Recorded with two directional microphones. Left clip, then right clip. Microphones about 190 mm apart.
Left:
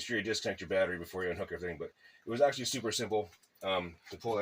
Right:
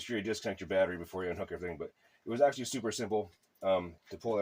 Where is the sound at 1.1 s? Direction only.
10° right (ahead or behind).